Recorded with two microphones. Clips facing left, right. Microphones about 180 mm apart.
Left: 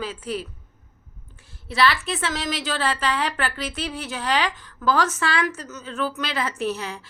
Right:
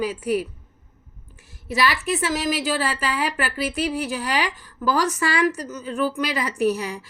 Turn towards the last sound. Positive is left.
turn(degrees=-10)  # may be behind; listen again after turning